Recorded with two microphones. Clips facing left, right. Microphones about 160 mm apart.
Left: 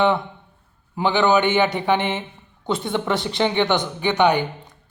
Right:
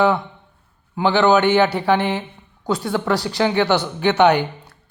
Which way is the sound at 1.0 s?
15° left (ahead or behind).